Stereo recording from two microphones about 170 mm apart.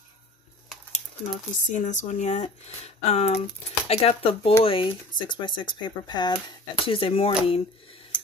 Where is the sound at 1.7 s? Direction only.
45° left (ahead or behind).